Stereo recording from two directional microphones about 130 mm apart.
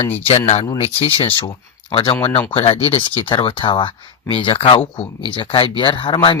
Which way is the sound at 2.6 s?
55° left (ahead or behind).